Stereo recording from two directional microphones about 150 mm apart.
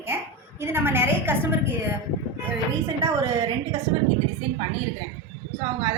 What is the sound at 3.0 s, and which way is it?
Speech, 20° right (ahead or behind).